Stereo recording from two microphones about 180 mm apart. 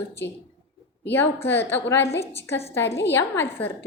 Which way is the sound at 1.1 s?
10° left (ahead or behind).